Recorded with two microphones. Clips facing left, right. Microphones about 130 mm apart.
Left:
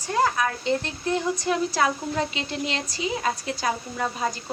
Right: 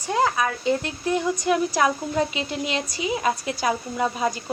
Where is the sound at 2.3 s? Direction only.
30° left (ahead or behind).